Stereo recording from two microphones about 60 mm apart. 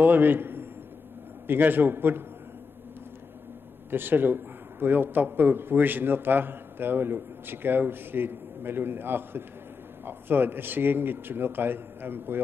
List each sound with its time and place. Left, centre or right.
0.0 s a man's voice: right
3.9 s a man's voice: right